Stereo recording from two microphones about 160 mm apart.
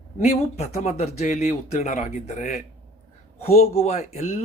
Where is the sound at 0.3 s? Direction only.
40° left (ahead or behind).